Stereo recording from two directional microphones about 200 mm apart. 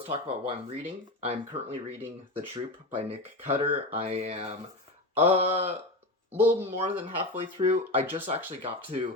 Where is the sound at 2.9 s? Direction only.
30° right (ahead or behind).